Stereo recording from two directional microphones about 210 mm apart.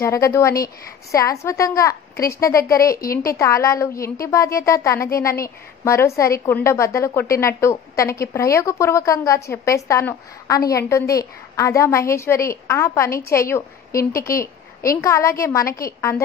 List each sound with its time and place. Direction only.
0.0 s a woman's voice: 15° left (ahead or behind)
2.9 s a woman's voice: 45° left (ahead or behind)
3.3 s a woman's voice: 15° left (ahead or behind)